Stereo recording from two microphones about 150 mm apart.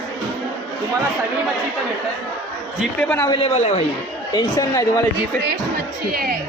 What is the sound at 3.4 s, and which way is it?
Speech, 40° left (ahead or behind).